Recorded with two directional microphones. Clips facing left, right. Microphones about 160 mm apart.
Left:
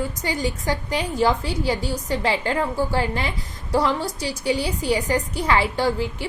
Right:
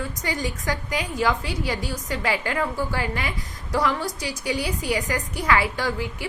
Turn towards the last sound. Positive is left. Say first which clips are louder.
# left 5 dB
turn(degrees=25)  # may be behind; listen again after turning